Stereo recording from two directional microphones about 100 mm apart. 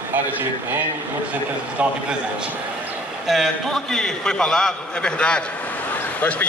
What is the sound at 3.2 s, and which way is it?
A man's voice, centre (ahead or behind).